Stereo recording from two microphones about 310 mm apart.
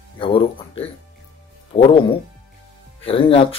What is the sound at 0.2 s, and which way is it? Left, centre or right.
A man's voice, centre.